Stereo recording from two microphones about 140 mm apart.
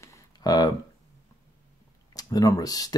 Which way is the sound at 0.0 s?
30° left (ahead or behind).